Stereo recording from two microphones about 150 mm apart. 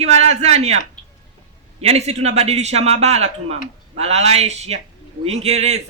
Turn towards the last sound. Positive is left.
turn(degrees=-45)  # may be behind; listen again after turning